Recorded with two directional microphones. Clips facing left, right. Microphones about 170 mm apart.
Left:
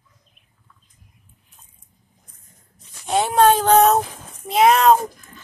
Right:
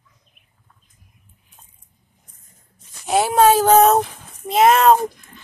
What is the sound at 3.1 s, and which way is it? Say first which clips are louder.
Speech: right 1 dB; 5° right (ahead or behind).